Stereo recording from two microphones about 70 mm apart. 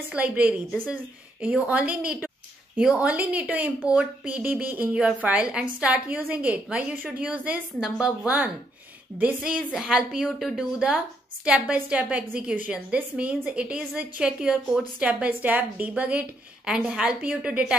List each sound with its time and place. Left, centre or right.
0.1 s speech: right
0.7 s speech: centre
1.4 s a woman's voice: centre
7.8 s a woman's voice: centre